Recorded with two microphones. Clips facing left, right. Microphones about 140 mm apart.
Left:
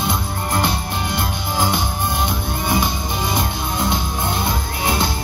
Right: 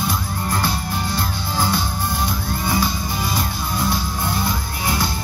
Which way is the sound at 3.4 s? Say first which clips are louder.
Left 2 dB; 20° left (ahead or behind).